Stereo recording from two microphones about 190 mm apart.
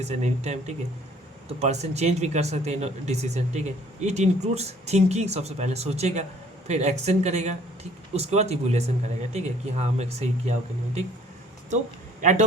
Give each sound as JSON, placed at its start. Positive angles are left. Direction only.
{"t": 0.0, "sound": "speech", "side_deg": -35}
{"t": 12.2, "sound": "speech", "side_deg": -40}